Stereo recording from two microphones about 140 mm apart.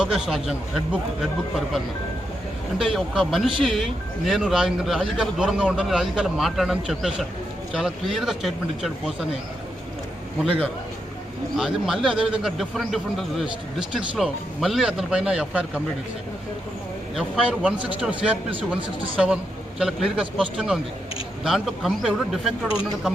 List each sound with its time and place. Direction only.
0.0 s a man's voice: centre (ahead or behind)
2.7 s a man's voice: centre (ahead or behind)
11.5 s a man's voice: centre (ahead or behind)
17.2 s a man's voice: 5° right (ahead or behind)